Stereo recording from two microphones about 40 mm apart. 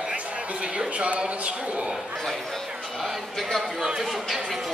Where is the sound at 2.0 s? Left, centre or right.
Centre.